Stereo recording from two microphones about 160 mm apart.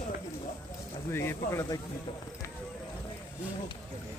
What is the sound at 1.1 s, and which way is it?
Speech, 15° left (ahead or behind).